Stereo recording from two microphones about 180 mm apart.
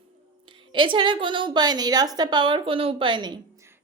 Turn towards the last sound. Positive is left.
turn(degrees=-25)  # may be behind; listen again after turning